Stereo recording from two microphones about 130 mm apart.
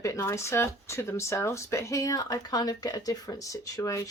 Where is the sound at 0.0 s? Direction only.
20° left (ahead or behind).